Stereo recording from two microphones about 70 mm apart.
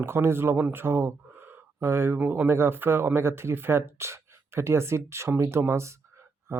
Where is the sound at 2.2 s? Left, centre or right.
Right.